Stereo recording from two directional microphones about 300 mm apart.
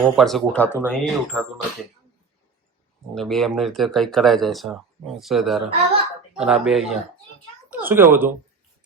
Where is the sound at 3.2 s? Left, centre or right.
Centre.